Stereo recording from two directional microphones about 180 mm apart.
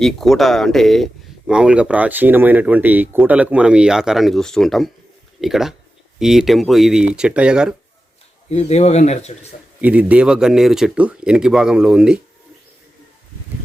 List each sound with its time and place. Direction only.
0.0 s speech: centre (ahead or behind)
8.4 s speech: 35° left (ahead or behind)
9.8 s speech: 5° right (ahead or behind)